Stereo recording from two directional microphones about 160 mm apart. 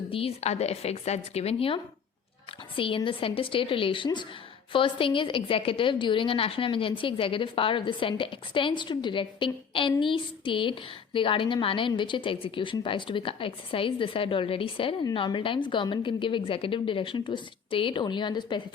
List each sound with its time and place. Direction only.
0.1 s a woman's voice: 35° left (ahead or behind)